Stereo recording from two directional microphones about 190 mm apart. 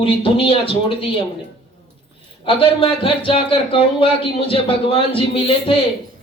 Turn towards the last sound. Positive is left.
turn(degrees=30)  # may be behind; listen again after turning